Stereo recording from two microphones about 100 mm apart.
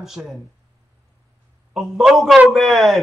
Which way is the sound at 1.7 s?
Centre (ahead or behind).